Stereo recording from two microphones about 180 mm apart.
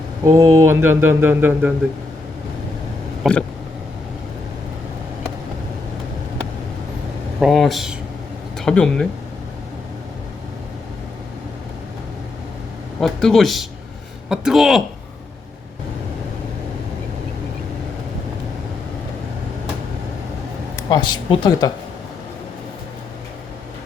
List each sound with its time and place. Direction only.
0.3 s speech: 20° right (ahead or behind)
3.2 s a man's voice: 5° right (ahead or behind)
7.3 s a man's voice: centre (ahead or behind)
13.0 s a man's voice: centre (ahead or behind)
20.9 s speech: 25° left (ahead or behind)